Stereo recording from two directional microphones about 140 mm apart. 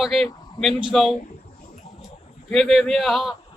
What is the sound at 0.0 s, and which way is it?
A man's voice, centre (ahead or behind).